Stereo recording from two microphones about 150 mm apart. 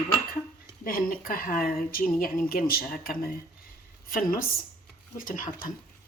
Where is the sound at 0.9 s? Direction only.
70° left (ahead or behind).